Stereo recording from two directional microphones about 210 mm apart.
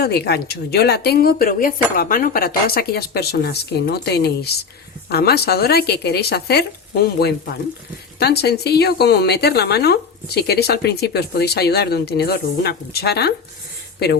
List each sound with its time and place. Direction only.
0.0 s a woman's voice: 50° left (ahead or behind)